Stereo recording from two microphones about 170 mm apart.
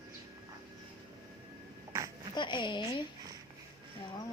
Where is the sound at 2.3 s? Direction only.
25° left (ahead or behind).